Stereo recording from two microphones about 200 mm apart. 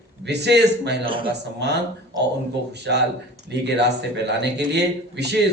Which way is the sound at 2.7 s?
55° right (ahead or behind).